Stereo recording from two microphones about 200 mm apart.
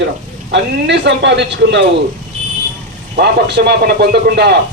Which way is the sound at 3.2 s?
55° right (ahead or behind).